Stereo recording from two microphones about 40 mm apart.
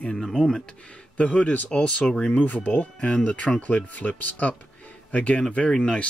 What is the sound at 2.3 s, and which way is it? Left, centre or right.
Speech, left.